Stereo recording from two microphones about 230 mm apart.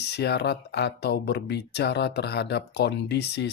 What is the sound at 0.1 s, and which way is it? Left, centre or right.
Speech, left.